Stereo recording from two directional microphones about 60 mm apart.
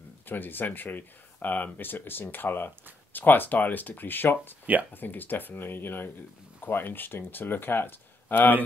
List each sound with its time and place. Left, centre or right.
0.3 s speech: left